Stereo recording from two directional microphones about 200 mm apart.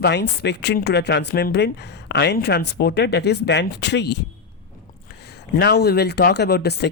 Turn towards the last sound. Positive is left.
turn(degrees=55)  # may be behind; listen again after turning